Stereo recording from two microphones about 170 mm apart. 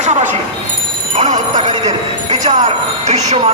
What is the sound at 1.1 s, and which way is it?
A man's voice, 45° right (ahead or behind).